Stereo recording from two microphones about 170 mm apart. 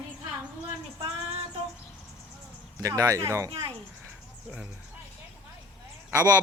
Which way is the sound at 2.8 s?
20° right (ahead or behind).